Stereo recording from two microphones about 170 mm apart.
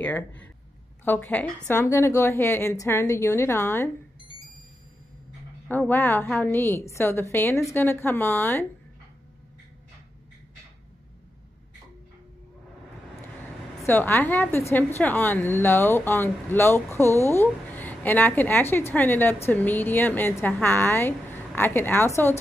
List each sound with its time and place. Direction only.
0.0 s a woman's voice: 10° left (ahead or behind)
5.7 s a woman's voice: 15° left (ahead or behind)
6.2 s a woman's voice: centre (ahead or behind)
6.5 s a woman's voice: 15° left (ahead or behind)
13.8 s a woman's voice: 15° left (ahead or behind)